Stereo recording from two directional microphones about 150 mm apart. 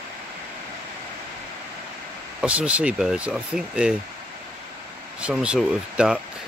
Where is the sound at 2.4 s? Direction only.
10° right (ahead or behind).